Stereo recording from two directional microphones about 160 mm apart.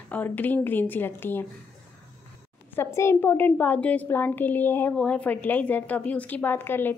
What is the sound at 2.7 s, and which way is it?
A woman's voice, 15° left (ahead or behind).